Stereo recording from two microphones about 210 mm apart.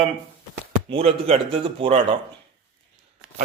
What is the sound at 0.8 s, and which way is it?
A man's voice, 30° right (ahead or behind).